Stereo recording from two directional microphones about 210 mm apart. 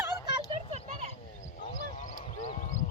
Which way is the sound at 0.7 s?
35° right (ahead or behind).